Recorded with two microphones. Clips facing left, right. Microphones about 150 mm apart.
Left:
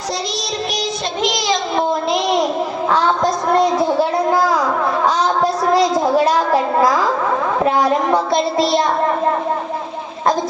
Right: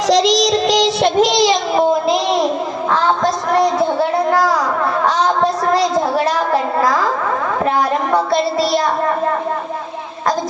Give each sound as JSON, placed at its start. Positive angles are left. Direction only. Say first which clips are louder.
{"t": 0.1, "sound": "child singing", "louder": "right 12 dB", "side_deg": -90}
{"t": 5.4, "sound": "a sound", "louder": "even", "side_deg": 15}
{"t": 8.1, "sound": "child singing", "louder": "right 1 dB", "side_deg": 25}